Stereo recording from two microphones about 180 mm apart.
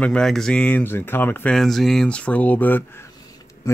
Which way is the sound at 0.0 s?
5° left (ahead or behind).